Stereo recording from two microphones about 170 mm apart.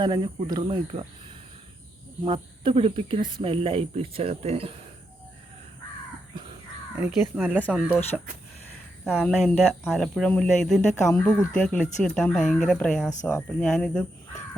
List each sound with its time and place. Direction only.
0.0 s speech: 25° right (ahead or behind)
6.9 s speech: 5° right (ahead or behind)
9.0 s speech: centre (ahead or behind)